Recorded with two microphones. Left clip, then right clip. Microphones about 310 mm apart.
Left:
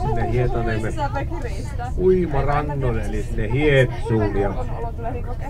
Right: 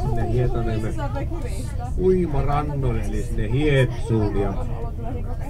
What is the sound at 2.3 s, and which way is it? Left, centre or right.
Speech, left.